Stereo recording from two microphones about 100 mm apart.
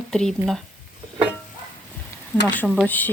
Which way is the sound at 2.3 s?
15° left (ahead or behind).